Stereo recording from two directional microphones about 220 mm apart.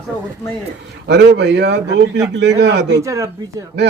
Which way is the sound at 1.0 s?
50° right (ahead or behind).